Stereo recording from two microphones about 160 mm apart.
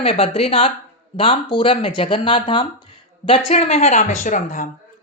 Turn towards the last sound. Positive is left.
turn(degrees=55)  # may be behind; listen again after turning